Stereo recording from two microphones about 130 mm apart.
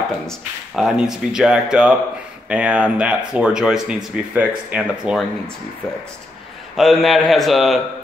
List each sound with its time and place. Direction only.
0.7 s speech: 5° right (ahead or behind)
6.8 s speech: centre (ahead or behind)